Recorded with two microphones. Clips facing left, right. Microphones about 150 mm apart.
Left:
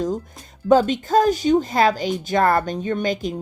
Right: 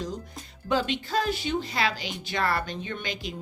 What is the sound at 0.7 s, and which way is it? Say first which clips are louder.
Speech: left 11 dB; 45° left (ahead or behind).